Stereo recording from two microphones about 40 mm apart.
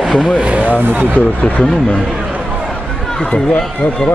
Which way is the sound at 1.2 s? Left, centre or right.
Left.